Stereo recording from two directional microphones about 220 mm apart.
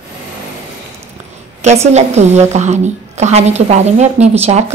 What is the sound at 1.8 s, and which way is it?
A woman's voice, 30° right (ahead or behind).